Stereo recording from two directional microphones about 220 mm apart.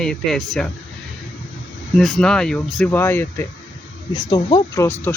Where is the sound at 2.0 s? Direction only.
Centre (ahead or behind).